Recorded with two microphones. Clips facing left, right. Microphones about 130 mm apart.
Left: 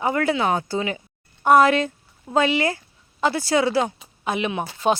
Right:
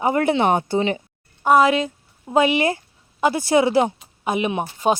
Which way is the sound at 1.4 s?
5° right (ahead or behind).